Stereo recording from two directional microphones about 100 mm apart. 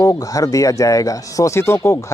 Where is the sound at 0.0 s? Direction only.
35° left (ahead or behind).